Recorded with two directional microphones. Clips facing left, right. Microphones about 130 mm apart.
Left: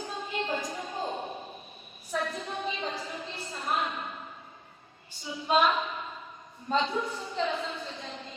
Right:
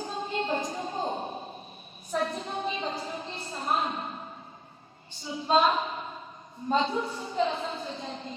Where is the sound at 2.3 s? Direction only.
25° right (ahead or behind).